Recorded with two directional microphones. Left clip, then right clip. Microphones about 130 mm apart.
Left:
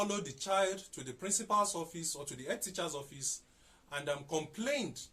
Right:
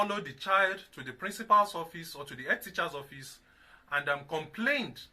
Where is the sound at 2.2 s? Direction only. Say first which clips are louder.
Right 11 dB; 30° left (ahead or behind).